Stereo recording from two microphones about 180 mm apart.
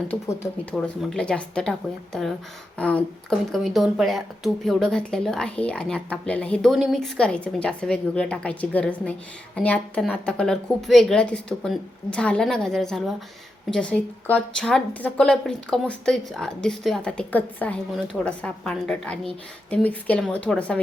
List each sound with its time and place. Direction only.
0.1 s speech: 10° left (ahead or behind)
2.7 s a woman's voice: 5° left (ahead or behind)